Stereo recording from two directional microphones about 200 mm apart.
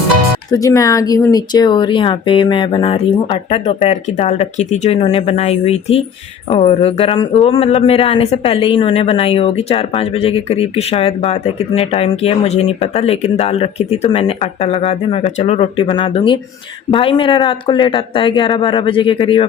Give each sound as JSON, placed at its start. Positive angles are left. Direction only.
{"t": 0.5, "sound": "speech", "side_deg": 15}